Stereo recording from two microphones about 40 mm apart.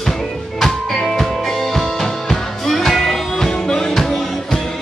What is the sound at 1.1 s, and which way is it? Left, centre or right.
Music, centre.